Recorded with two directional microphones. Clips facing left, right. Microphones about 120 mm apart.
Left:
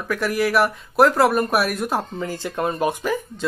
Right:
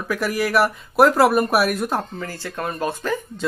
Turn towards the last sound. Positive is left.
turn(degrees=5)  # may be behind; listen again after turning